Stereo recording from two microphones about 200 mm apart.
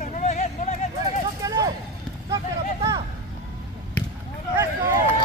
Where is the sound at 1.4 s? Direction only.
20° right (ahead or behind).